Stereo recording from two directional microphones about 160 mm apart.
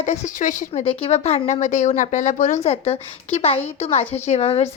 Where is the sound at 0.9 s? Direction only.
35° left (ahead or behind).